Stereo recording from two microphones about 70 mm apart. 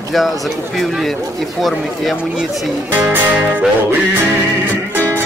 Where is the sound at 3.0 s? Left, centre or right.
Centre.